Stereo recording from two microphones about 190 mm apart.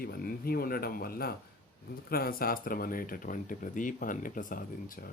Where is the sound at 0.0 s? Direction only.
55° left (ahead or behind).